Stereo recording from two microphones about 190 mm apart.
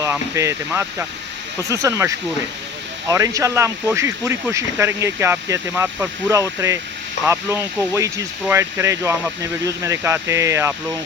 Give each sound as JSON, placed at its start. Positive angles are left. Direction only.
{"t": 0.0, "sound": "speech", "side_deg": -15}